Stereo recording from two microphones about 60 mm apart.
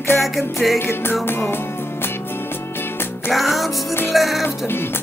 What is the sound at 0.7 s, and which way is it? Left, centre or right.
Music, left.